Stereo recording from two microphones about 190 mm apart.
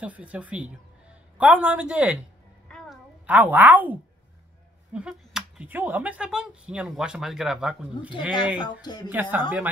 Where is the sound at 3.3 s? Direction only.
10° right (ahead or behind).